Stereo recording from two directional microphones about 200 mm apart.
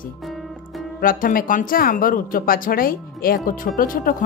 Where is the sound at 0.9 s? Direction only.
45° left (ahead or behind).